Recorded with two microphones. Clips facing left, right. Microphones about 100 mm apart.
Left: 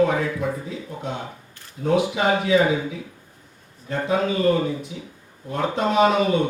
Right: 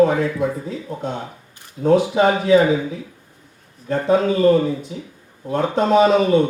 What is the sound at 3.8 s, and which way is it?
Speech, 35° right (ahead or behind).